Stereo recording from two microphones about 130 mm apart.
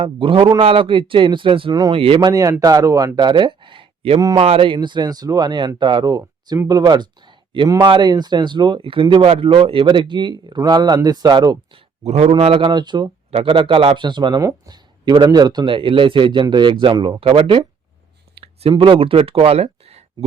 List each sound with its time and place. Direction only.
0.0 s speech: 40° right (ahead or behind)
2.3 s speech: 25° right (ahead or behind)
12.0 s speech: 55° right (ahead or behind)
12.3 s speech: 45° right (ahead or behind)
18.4 s a sound: 45° right (ahead or behind)
18.7 s speech: 40° right (ahead or behind)